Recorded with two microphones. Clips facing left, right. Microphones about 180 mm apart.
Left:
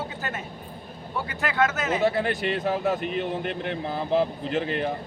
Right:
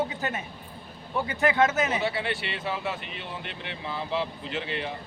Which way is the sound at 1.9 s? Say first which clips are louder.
Left 5 dB; 45° left (ahead or behind).